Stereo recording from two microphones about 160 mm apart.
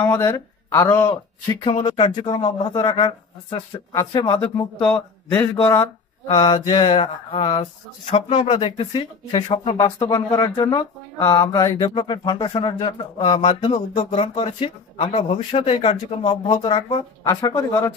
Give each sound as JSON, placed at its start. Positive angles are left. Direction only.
{"t": 0.0, "sound": "speech", "side_deg": 15}
{"t": 2.0, "sound": "speech", "side_deg": 40}
{"t": 4.7, "sound": "a man's voice", "side_deg": 5}
{"t": 5.4, "sound": "speech", "side_deg": 25}
{"t": 17.2, "sound": "speech", "side_deg": 25}